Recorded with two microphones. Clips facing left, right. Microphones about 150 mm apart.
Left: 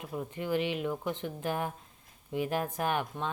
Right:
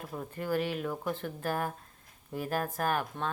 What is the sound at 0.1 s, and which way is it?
A woman's voice, 10° left (ahead or behind).